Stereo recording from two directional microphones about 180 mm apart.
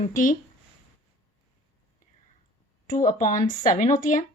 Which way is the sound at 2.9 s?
45° left (ahead or behind).